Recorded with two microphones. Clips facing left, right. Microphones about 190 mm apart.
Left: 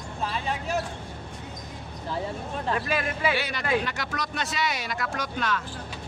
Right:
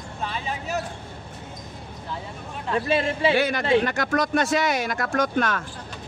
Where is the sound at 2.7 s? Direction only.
25° right (ahead or behind).